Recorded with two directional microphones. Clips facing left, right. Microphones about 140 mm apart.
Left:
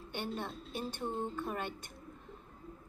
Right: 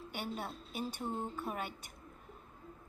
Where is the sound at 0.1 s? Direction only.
10° right (ahead or behind).